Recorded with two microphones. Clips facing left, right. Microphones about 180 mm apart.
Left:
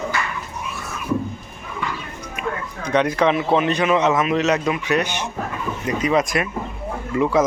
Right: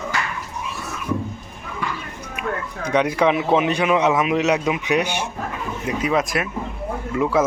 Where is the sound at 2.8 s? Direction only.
10° right (ahead or behind).